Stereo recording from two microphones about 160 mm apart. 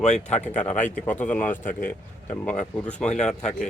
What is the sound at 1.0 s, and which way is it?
Speech, 10° left (ahead or behind).